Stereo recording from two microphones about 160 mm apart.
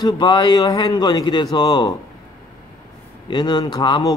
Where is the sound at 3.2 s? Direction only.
30° left (ahead or behind).